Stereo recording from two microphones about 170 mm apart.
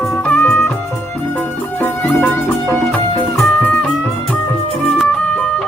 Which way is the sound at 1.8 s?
10° left (ahead or behind).